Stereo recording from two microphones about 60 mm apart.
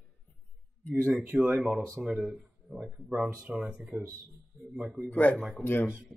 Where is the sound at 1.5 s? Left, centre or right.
Centre.